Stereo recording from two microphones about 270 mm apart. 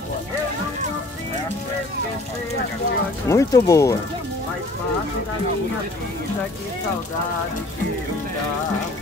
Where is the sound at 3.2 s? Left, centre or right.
Centre.